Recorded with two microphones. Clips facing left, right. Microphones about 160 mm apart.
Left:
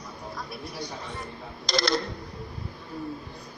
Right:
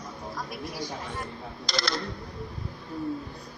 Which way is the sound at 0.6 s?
90° right.